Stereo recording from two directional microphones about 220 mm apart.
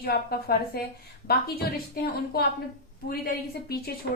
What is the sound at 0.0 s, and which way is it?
A woman's voice, 45° left (ahead or behind).